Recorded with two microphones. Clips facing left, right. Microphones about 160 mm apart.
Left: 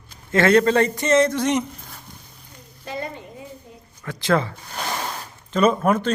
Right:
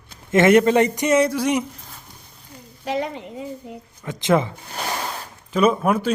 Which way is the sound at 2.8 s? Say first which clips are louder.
Right 6 dB; 85° right.